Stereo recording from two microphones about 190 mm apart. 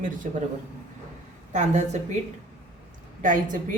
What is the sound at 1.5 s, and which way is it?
Speech, 40° right (ahead or behind).